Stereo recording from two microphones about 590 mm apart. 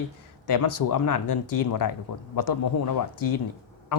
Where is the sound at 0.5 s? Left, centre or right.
Left.